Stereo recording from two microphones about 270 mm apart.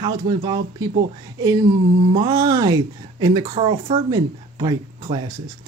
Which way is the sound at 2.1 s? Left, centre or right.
Centre.